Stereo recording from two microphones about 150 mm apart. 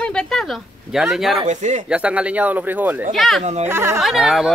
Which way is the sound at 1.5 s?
55° right (ahead or behind).